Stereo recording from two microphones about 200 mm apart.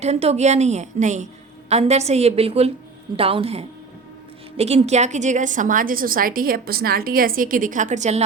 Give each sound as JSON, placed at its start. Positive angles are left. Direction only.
{"t": 0.0, "sound": "a woman's voice", "side_deg": -30}